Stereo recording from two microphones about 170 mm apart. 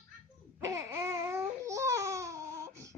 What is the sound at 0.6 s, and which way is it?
Baby cry, 20° right (ahead or behind).